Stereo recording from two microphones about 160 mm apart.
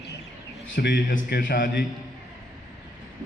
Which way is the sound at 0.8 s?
90° left.